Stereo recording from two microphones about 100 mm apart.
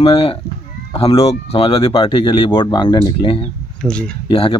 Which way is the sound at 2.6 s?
45° left (ahead or behind).